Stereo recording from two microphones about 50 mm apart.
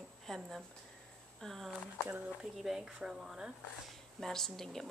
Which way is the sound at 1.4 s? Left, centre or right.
Centre.